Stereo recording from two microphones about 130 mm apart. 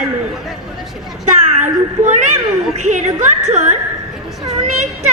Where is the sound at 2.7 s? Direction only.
65° right (ahead or behind).